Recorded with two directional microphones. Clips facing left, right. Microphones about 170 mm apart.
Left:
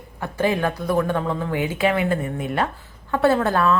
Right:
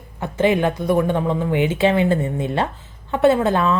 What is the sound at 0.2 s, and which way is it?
A woman's voice, 20° right (ahead or behind).